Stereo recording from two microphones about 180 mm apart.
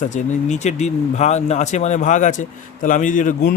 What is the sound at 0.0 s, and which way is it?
Speech, 45° left (ahead or behind).